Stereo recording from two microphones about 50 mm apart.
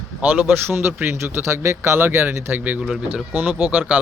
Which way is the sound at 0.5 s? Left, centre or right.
Right.